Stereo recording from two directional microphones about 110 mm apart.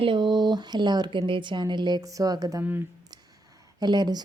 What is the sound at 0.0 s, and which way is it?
Speech, 45° right (ahead or behind).